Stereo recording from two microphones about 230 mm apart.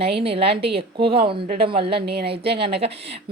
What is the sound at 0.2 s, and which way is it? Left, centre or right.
A woman's voice, right.